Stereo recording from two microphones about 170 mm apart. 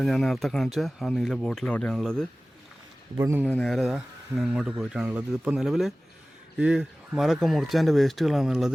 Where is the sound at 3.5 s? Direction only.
5° left (ahead or behind).